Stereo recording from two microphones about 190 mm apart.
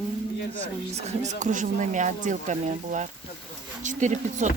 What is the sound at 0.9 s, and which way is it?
Speech, 35° right (ahead or behind).